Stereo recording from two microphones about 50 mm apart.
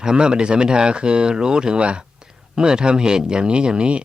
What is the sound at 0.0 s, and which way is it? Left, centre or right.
Speech, centre.